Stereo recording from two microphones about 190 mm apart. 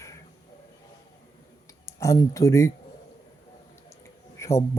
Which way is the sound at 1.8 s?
15° left (ahead or behind).